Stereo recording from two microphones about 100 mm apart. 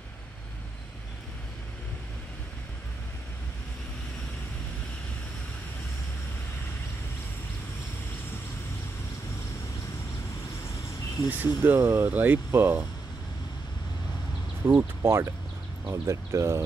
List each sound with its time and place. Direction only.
11.2 s speech: 20° right (ahead or behind)
14.8 s speech: 25° right (ahead or behind)